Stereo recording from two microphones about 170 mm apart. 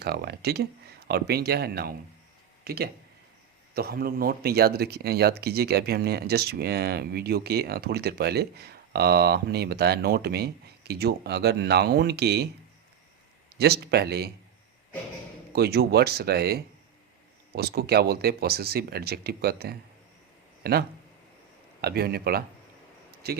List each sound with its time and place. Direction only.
0.0 s speech: 70° right (ahead or behind)
13.6 s speech: 70° right (ahead or behind)
15.5 s speech: 70° right (ahead or behind)